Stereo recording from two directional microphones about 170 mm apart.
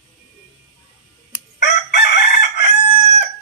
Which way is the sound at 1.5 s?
75° left (ahead or behind).